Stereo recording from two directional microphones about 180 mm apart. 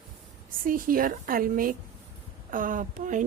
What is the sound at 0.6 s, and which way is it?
A woman's voice, 50° right (ahead or behind).